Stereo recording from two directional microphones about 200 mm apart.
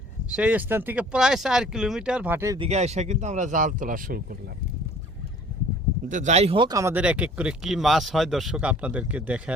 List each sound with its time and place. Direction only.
0.3 s speech: 5° right (ahead or behind)
2.6 s speech: 30° right (ahead or behind)
6.1 s speech: 35° right (ahead or behind); by 9.4 s 5° right (ahead or behind)